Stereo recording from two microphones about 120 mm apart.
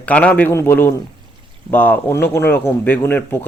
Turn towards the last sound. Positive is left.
turn(degrees=20)  # may be behind; listen again after turning